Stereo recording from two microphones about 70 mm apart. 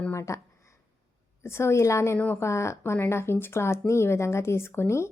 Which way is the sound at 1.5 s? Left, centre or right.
Left.